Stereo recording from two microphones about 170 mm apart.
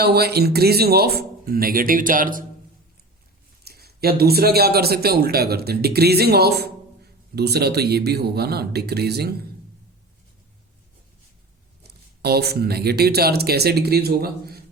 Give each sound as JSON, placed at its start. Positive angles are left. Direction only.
{"t": 0.0, "sound": "speech", "side_deg": -70}
{"t": 3.6, "sound": "speech", "side_deg": -70}
{"t": 11.8, "sound": "speech", "side_deg": -70}